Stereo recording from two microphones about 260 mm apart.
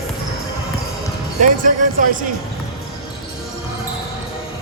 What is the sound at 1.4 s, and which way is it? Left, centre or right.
Speech, right.